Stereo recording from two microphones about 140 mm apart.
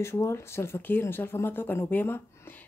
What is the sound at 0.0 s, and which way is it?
Speech, 20° left (ahead or behind).